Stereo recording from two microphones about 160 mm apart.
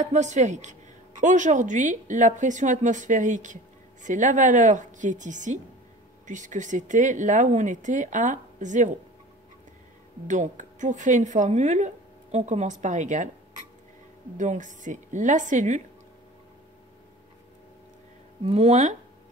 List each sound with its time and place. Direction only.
0.0 s speech: 50° right (ahead or behind)
10.2 s speech: 50° right (ahead or behind)
14.3 s speech: 50° right (ahead or behind)
18.4 s speech: 40° right (ahead or behind)